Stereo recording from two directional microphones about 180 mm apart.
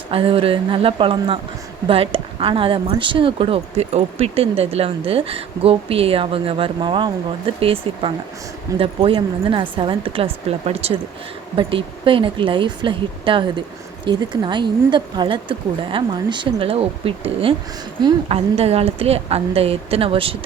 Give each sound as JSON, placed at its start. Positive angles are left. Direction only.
{"t": 0.1, "sound": "speech", "side_deg": -30}